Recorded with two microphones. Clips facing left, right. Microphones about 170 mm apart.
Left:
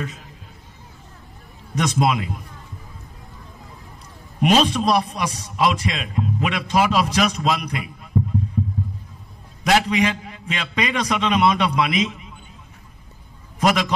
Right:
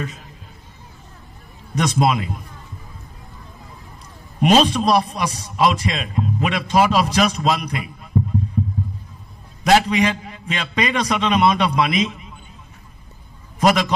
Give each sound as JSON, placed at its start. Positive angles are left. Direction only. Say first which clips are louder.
{"t": 1.8, "sound": "a man's voice", "louder": "right 2 dB", "side_deg": -35}
{"t": 4.4, "sound": "a man's voice", "louder": "right 2 dB", "side_deg": -35}
{"t": 9.7, "sound": "a man's voice", "louder": "right 3 dB", "side_deg": -35}
{"t": 13.6, "sound": "a man's voice", "louder": "right 2 dB", "side_deg": -40}